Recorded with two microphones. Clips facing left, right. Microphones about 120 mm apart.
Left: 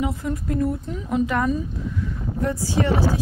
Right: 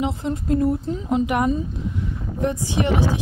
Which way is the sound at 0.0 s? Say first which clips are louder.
Right 1 dB; 25° right (ahead or behind).